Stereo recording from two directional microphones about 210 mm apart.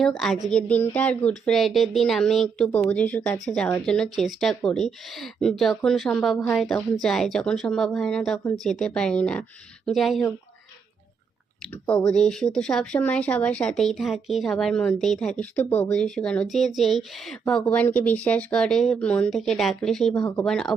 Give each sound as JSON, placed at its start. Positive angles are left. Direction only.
{"t": 0.0, "sound": "speech", "side_deg": 0}
{"t": 11.9, "sound": "speech", "side_deg": 5}